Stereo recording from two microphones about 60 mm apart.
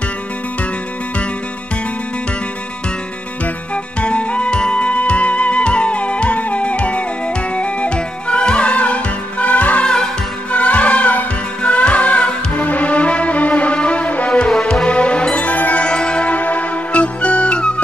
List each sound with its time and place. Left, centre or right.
3.7 s music: centre
14.5 s music: centre